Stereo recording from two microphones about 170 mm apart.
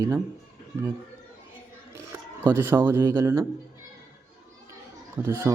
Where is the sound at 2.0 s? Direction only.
15° right (ahead or behind).